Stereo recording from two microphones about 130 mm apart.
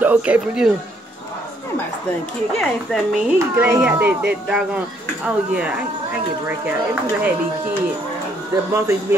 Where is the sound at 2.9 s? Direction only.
5° left (ahead or behind).